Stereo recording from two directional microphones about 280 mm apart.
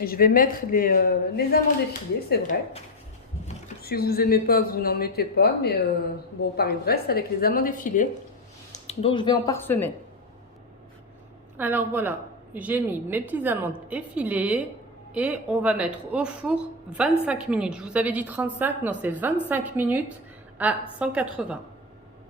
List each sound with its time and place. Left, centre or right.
0.0 s speech: left; by 9.9 s centre
11.5 s a woman's voice: centre